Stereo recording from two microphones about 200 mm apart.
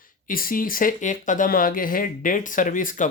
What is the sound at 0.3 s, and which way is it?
Speech, 45° left (ahead or behind).